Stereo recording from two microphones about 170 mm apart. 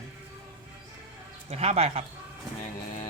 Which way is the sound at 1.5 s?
40° right (ahead or behind).